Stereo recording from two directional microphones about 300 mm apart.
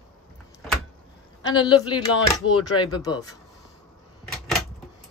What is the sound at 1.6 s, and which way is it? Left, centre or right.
Speech, centre.